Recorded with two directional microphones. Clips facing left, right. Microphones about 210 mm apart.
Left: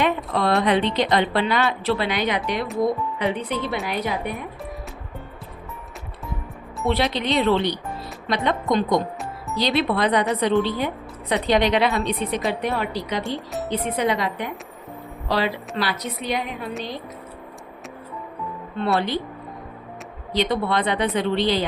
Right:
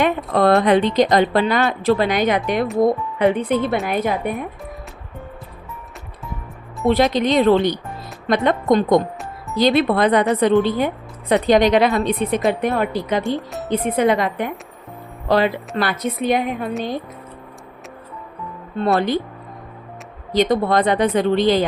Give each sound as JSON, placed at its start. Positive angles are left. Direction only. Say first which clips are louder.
{"t": 0.0, "sound": "speech", "louder": "right 5 dB", "side_deg": -50}
{"t": 6.8, "sound": "speech", "louder": "right 6 dB", "side_deg": -45}
{"t": 18.9, "sound": "speech", "louder": "right 4 dB", "side_deg": -50}
{"t": 20.3, "sound": "speech", "louder": "right 6 dB", "side_deg": -45}